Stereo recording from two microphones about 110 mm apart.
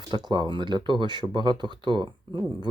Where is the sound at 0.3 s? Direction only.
45° right (ahead or behind).